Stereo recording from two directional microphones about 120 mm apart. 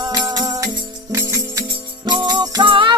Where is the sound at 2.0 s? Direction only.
40° right (ahead or behind).